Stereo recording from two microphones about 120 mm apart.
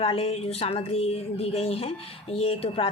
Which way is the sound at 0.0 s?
50° left (ahead or behind).